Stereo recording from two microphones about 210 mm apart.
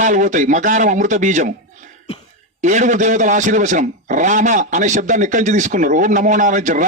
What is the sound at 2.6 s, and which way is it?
A man's voice, 35° right (ahead or behind).